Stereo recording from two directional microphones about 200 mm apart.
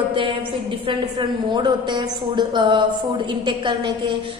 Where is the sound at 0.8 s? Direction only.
20° right (ahead or behind).